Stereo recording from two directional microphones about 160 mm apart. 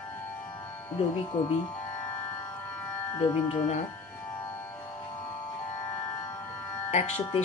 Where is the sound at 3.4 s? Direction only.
40° left (ahead or behind).